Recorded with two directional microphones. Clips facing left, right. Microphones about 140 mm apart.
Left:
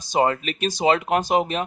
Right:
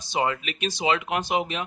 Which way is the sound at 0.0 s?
40° left (ahead or behind).